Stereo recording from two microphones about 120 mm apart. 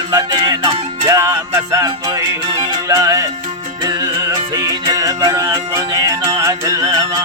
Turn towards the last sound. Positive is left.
turn(degrees=-30)  # may be behind; listen again after turning